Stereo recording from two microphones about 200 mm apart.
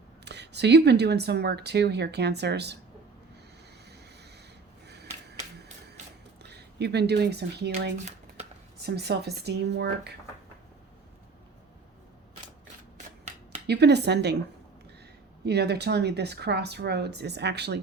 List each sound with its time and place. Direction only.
0.3 s speech: 55° right (ahead or behind)
4.9 s finger snapping: 55° right (ahead or behind)
6.4 s speech: 55° right (ahead or behind)
8.8 s speech: 55° right (ahead or behind)
13.7 s speech: 55° right (ahead or behind)
15.4 s speech: 55° right (ahead or behind)